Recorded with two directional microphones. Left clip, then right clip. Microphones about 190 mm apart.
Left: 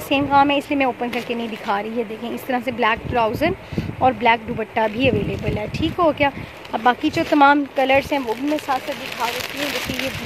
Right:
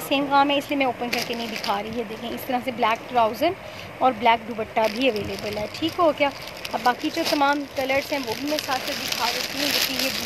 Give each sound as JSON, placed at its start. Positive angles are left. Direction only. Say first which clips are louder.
{"t": 0.1, "sound": "speech", "louder": "left 4 dB", "side_deg": 45}